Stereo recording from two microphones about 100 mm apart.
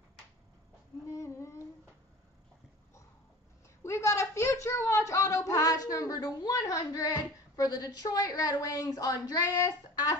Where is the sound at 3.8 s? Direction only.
30° left (ahead or behind).